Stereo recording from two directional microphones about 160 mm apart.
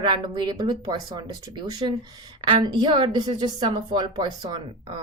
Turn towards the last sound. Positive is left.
turn(degrees=-30)  # may be behind; listen again after turning